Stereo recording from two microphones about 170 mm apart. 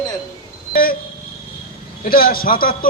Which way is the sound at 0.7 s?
60° left (ahead or behind).